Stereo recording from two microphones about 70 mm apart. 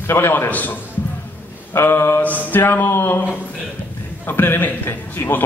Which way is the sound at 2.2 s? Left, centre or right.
Left.